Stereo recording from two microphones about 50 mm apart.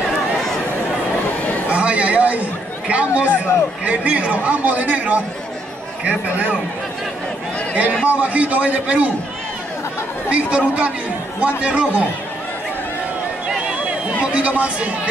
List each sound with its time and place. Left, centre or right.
1.7 s a sound: right
2.9 s a man's voice: right
7.7 s a man's voice: right
10.3 s a man's voice: right
14.2 s a man's voice: right